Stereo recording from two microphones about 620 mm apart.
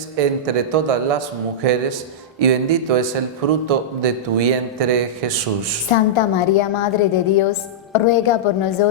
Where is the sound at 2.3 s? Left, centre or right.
Right.